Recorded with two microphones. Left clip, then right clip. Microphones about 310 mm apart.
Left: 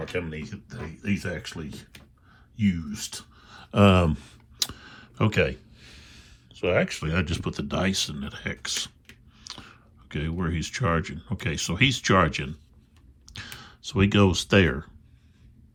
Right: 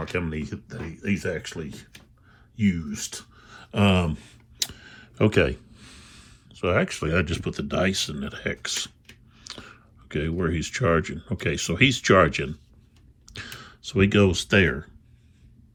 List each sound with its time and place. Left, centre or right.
0.3 s speech: centre
0.7 s speech: centre